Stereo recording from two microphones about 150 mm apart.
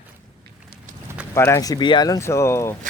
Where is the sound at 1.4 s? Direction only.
20° left (ahead or behind).